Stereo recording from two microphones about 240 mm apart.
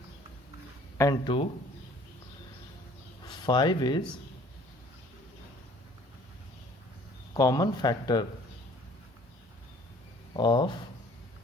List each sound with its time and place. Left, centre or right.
0.9 s speech: centre
3.2 s speech: centre
7.3 s speech: centre
10.3 s speech: centre